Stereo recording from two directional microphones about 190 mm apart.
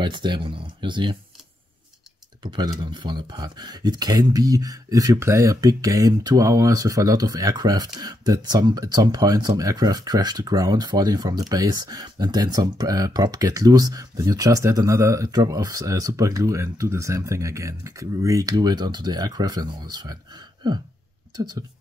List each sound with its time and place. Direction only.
0.0 s speech: 25° right (ahead or behind)
2.4 s speech: 20° right (ahead or behind)